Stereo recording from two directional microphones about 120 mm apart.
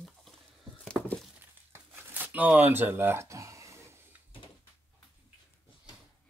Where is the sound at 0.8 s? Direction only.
10° left (ahead or behind).